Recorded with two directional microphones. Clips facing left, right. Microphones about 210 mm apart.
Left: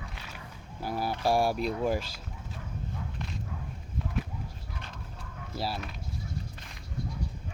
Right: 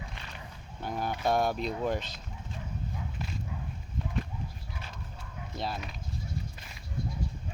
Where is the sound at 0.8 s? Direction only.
5° left (ahead or behind).